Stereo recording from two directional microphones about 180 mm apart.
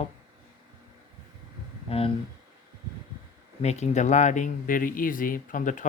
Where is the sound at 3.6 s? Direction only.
40° left (ahead or behind).